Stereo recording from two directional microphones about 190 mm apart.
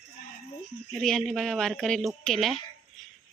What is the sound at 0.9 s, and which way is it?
Speech, 5° left (ahead or behind).